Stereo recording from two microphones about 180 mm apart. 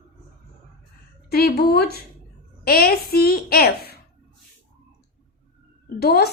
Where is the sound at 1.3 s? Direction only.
60° left (ahead or behind).